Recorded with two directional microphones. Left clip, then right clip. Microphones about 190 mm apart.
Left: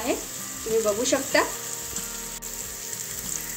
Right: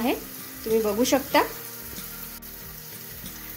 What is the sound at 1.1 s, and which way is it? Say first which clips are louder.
Speech: right 1 dB; 45° right (ahead or behind).